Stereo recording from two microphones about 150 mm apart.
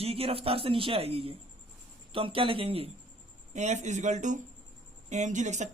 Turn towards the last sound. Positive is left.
turn(degrees=-55)  # may be behind; listen again after turning